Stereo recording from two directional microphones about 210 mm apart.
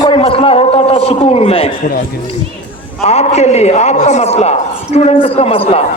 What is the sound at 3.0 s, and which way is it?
A man's voice, 30° left (ahead or behind).